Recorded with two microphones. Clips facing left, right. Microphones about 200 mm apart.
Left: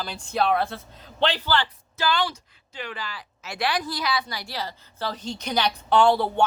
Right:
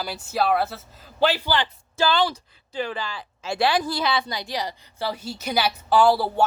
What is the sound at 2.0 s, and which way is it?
Speech, 30° right (ahead or behind).